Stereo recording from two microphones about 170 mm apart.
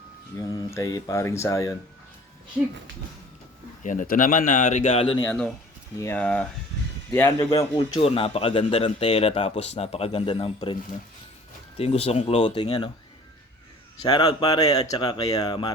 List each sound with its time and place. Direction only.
0.3 s speech: 20° left (ahead or behind)
3.8 s speech: 55° left (ahead or behind); by 5.2 s 35° left (ahead or behind)
5.2 s speech: 10° left (ahead or behind)
7.8 s speech: 35° left (ahead or behind)
11.8 s speech: 35° left (ahead or behind)
14.0 s speech: 25° left (ahead or behind)